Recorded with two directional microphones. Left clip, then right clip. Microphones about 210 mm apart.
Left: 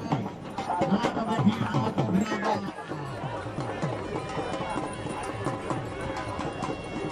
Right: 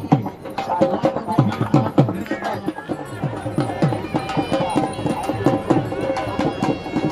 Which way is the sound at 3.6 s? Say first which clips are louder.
Right 12 dB; 45° right (ahead or behind).